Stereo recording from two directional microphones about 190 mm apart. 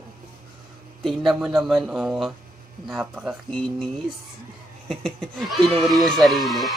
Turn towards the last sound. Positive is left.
turn(degrees=0)  # may be behind; listen again after turning